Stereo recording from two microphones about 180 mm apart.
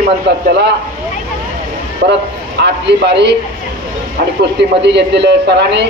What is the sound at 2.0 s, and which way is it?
Speech, 60° right (ahead or behind).